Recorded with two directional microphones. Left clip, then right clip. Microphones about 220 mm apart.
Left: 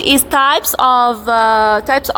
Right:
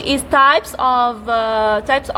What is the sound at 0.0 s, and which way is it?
A woman's voice, 15° left (ahead or behind).